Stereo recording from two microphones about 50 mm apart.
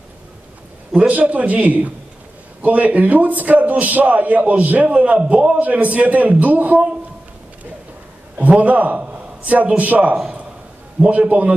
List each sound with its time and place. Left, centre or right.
0.9 s a man's voice: right
8.4 s a man's voice: right